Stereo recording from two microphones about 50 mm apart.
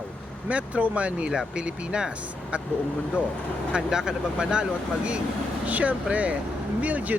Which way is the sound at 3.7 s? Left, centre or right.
Centre.